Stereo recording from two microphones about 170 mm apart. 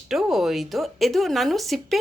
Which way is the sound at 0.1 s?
Centre (ahead or behind).